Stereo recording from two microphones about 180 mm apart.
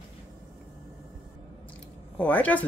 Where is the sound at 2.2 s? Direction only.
10° left (ahead or behind).